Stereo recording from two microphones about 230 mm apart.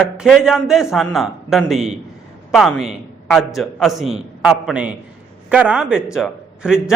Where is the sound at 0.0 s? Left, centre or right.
Centre.